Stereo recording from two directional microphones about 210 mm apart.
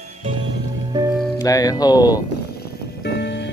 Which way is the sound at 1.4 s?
15° left (ahead or behind).